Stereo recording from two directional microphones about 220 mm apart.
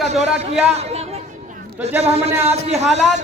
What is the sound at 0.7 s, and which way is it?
Chatter, 30° right (ahead or behind).